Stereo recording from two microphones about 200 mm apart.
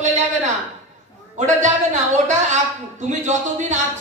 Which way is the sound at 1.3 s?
35° right (ahead or behind).